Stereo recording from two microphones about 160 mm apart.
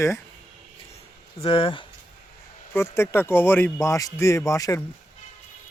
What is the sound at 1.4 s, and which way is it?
Speech, 35° left (ahead or behind).